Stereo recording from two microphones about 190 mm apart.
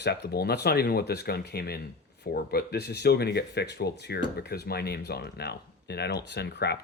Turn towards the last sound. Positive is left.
turn(degrees=60)  # may be behind; listen again after turning